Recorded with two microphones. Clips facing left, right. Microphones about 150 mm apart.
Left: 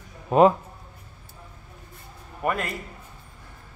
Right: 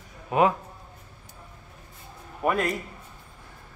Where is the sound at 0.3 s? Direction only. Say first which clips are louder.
Left 5 dB; 30° left (ahead or behind).